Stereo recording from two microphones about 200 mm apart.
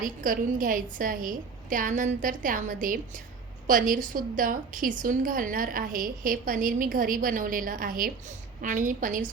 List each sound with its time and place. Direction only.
0.0 s a woman's voice: 45° right (ahead or behind)